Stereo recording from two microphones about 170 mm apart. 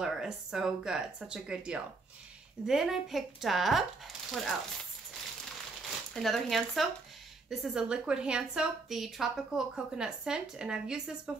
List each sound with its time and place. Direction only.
0.0 s a woman's voice: 5° right (ahead or behind)
6.1 s a woman's voice: centre (ahead or behind)